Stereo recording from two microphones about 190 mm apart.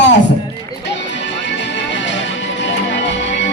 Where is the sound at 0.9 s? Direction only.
70° left (ahead or behind).